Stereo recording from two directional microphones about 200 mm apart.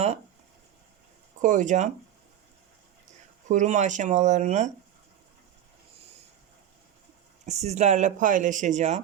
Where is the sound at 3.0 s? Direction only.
35° right (ahead or behind).